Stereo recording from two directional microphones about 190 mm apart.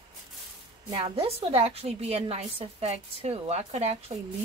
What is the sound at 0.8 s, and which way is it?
A woman's voice, 20° right (ahead or behind).